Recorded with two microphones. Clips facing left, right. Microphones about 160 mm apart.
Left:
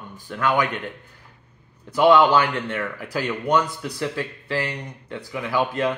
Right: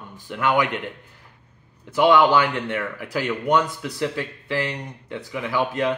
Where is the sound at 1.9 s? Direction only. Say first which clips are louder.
Left 1 dB; 20° right (ahead or behind).